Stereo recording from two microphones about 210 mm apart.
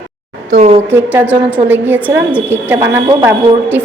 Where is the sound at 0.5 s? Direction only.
30° right (ahead or behind).